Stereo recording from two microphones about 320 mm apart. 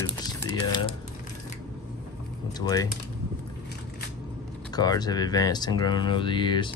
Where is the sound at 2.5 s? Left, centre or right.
Centre.